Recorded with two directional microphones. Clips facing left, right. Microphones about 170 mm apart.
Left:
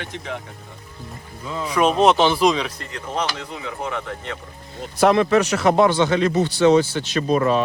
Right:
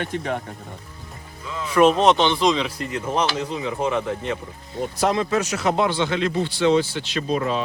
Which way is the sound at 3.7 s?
25° right (ahead or behind).